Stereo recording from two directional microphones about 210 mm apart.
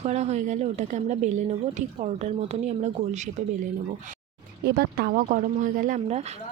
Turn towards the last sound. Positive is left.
turn(degrees=-30)  # may be behind; listen again after turning